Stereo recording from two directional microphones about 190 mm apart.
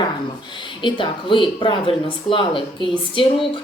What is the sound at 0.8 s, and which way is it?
A woman's voice, 25° left (ahead or behind).